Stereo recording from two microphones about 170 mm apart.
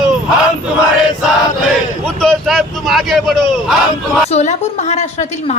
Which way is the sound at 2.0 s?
5° left (ahead or behind).